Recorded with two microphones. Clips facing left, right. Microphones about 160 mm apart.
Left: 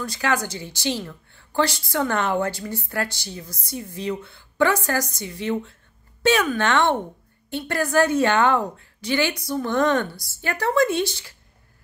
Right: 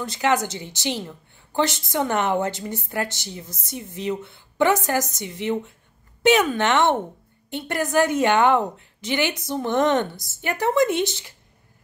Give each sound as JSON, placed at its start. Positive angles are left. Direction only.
{"t": 0.0, "sound": "a woman's voice", "side_deg": -20}